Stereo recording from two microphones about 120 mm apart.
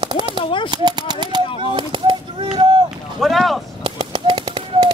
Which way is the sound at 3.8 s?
45° right (ahead or behind).